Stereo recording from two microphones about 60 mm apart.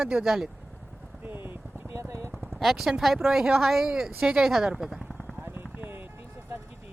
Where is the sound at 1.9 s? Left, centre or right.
Right.